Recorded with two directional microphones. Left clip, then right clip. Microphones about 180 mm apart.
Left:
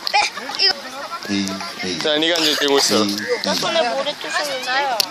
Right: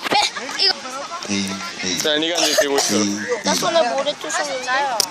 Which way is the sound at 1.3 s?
50° left (ahead or behind).